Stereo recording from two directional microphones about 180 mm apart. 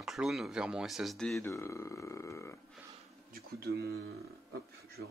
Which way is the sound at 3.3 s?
60° right (ahead or behind).